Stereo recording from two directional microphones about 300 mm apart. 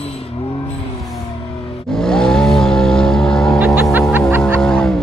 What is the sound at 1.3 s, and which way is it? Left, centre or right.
Music, centre.